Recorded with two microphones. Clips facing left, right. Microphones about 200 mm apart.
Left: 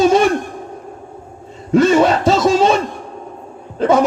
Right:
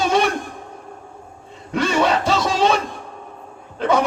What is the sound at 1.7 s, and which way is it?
Music, 45° left (ahead or behind).